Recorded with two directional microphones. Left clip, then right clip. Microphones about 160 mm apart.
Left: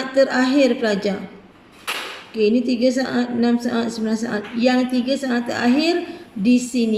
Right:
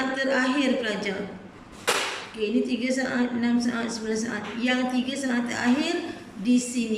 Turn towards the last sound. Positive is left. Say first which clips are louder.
# left 6 dB
turn(degrees=80)